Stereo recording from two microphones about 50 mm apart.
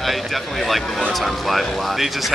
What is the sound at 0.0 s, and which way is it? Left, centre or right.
Speech, centre.